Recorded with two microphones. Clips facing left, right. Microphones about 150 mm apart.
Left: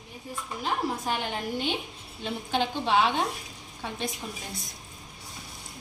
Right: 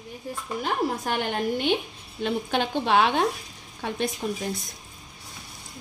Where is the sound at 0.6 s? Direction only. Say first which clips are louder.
Right 3 dB; 65° right (ahead or behind).